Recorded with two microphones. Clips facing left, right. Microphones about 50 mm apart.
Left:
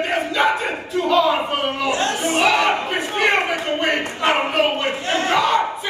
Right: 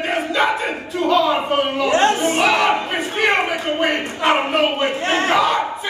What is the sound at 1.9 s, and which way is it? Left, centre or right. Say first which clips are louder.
Speech: right 5 dB; right.